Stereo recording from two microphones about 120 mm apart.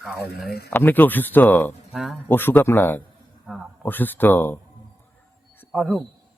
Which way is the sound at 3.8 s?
15° left (ahead or behind).